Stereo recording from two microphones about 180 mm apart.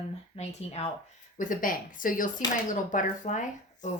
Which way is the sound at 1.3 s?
45° left (ahead or behind).